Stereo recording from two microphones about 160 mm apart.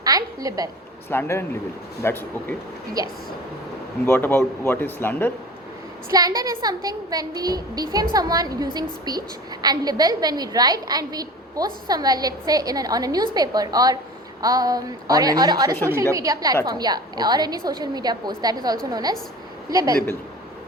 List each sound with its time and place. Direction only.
0.0 s a woman's voice: 20° right (ahead or behind)
1.1 s speech: 15° left (ahead or behind)
4.0 s speech: 15° left (ahead or behind)
6.1 s a woman's voice: 25° right (ahead or behind)